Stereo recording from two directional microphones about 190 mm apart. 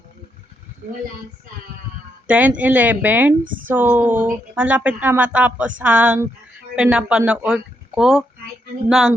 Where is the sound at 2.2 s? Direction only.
5° right (ahead or behind).